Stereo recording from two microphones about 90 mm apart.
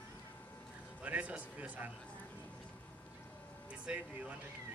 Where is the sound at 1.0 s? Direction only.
15° right (ahead or behind).